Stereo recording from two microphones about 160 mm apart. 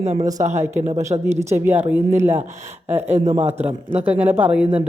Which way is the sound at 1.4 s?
15° right (ahead or behind).